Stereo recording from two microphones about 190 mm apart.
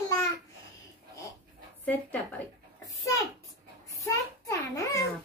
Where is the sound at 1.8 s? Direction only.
10° left (ahead or behind).